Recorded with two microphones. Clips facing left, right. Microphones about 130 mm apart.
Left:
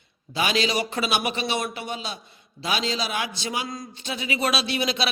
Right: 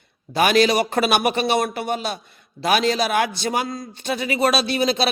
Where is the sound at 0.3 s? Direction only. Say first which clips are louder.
Right 7 dB; 55° right (ahead or behind).